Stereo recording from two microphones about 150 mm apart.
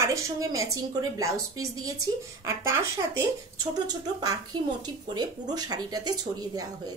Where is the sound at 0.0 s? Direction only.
20° right (ahead or behind).